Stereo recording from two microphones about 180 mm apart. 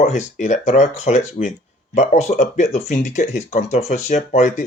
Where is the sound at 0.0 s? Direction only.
40° left (ahead or behind).